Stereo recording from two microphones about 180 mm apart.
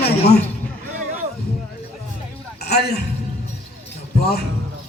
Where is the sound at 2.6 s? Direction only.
65° left (ahead or behind).